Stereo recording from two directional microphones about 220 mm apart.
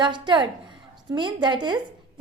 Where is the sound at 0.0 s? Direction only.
20° right (ahead or behind).